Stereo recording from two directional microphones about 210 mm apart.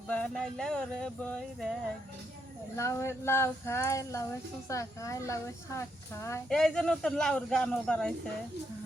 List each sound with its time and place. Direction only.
0.1 s speech: 5° left (ahead or behind)
2.7 s speech: 15° left (ahead or behind)
6.5 s speech: 5° left (ahead or behind)